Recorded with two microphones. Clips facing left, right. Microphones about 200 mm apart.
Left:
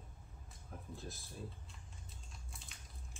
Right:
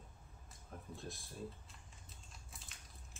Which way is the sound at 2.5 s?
Centre (ahead or behind).